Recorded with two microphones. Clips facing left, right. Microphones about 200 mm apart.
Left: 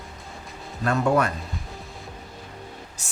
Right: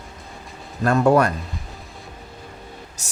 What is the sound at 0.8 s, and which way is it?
Speech, 45° right (ahead or behind).